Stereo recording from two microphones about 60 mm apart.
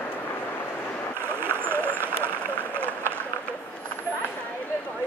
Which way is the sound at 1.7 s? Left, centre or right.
Right.